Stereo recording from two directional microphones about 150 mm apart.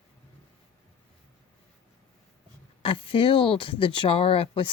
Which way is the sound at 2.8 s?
35° left (ahead or behind).